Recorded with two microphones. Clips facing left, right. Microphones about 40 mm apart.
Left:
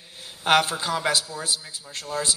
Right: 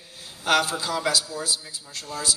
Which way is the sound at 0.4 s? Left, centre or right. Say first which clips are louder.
Left 2 dB; left.